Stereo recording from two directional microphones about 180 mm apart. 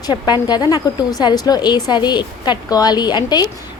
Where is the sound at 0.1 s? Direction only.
25° left (ahead or behind).